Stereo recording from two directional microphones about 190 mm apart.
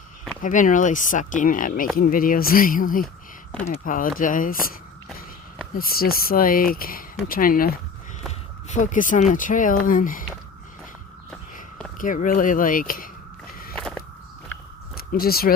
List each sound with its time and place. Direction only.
0.4 s speech: 45° left (ahead or behind)
8.3 s speech: 40° left (ahead or behind)
11.9 s speech: 45° left (ahead or behind)
13.7 s a sound: 5° left (ahead or behind)
14.9 s speech: 50° left (ahead or behind)